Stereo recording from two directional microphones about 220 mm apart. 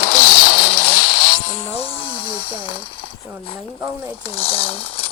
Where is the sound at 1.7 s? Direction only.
25° left (ahead or behind).